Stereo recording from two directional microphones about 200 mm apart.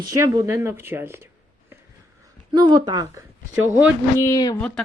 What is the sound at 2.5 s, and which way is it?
Speech, 20° right (ahead or behind).